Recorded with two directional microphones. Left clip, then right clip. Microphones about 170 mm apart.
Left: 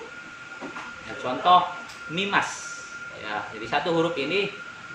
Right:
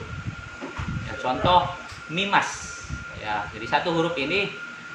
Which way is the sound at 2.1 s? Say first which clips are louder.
Right 2 dB; 15° right (ahead or behind).